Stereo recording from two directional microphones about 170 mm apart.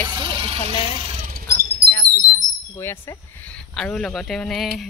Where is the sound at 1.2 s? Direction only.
60° right (ahead or behind).